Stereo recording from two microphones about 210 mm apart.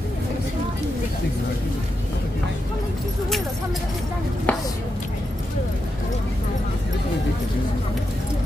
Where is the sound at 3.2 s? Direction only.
Centre (ahead or behind).